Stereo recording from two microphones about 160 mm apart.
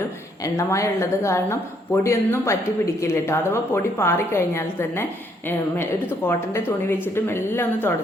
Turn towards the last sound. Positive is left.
turn(degrees=15)  # may be behind; listen again after turning